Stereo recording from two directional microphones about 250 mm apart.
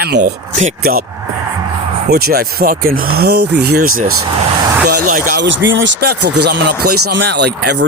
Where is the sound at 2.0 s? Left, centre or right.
Right.